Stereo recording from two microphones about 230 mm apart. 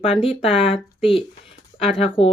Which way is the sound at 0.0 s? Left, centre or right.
Left.